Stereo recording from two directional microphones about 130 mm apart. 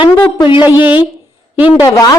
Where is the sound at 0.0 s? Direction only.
40° left (ahead or behind).